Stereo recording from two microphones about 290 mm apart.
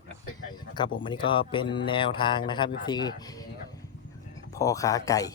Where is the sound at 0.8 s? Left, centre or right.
Centre.